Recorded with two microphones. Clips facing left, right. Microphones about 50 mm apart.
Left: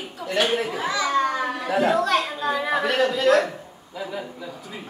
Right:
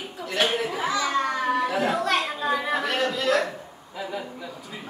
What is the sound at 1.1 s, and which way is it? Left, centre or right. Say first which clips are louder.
Children playing: left 3 dB; centre.